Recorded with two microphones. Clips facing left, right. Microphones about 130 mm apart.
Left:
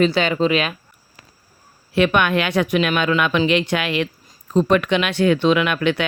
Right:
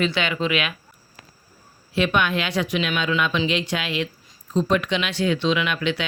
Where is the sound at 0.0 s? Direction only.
40° left (ahead or behind).